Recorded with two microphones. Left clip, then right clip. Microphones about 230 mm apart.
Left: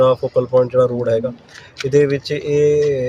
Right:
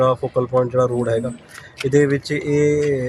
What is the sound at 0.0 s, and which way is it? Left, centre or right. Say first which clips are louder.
Speech: left 3 dB; centre.